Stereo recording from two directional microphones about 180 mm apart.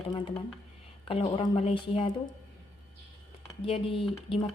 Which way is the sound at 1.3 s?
30° left (ahead or behind).